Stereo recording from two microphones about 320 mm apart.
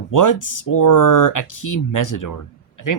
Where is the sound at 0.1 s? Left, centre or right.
Left.